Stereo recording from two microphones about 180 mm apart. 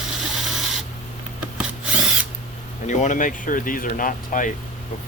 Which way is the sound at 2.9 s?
45° left (ahead or behind).